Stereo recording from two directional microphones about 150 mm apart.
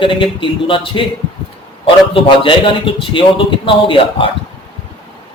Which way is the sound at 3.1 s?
35° left (ahead or behind).